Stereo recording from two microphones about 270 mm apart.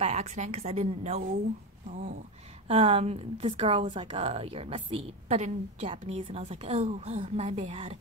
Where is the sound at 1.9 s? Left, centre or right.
Right.